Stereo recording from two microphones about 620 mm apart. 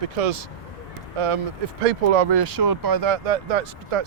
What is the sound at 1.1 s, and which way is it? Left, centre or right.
Speech, right.